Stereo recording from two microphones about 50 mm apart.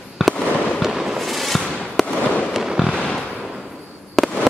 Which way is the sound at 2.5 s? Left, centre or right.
Centre.